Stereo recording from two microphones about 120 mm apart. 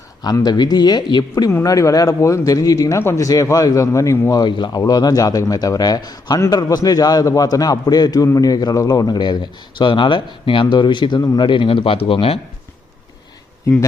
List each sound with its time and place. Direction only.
0.2 s a man's voice: 35° left (ahead or behind)
1.5 s a man's voice: 25° left (ahead or behind); by 12.4 s 50° left (ahead or behind)